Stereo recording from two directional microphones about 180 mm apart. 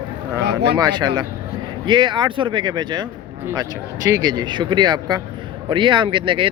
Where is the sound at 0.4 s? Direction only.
65° right (ahead or behind).